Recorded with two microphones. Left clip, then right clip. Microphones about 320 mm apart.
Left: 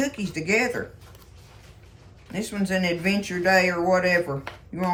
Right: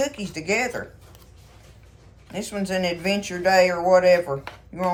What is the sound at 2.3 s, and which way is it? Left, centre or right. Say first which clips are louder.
Speech: right 1 dB; centre.